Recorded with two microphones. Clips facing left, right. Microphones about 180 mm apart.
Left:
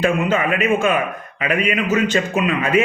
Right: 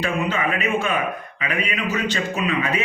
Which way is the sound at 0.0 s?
45° left (ahead or behind).